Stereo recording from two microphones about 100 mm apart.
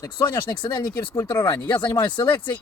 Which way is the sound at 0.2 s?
50° left (ahead or behind).